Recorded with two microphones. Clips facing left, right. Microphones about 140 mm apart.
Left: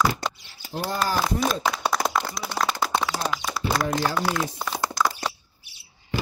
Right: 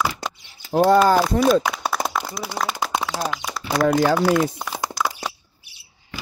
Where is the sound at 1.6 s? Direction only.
5° right (ahead or behind).